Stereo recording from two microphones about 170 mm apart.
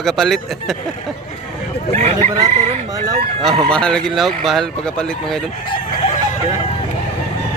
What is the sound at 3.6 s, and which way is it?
Speech, 5° left (ahead or behind).